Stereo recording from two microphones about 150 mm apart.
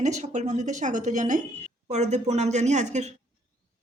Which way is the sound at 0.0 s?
55° right (ahead or behind).